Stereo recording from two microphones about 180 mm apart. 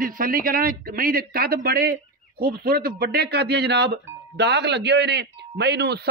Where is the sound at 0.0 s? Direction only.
50° right (ahead or behind).